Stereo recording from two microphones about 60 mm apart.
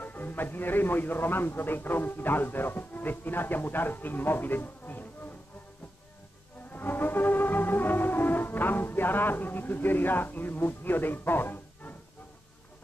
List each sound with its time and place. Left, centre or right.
0.0 s speech: left
6.7 s music: left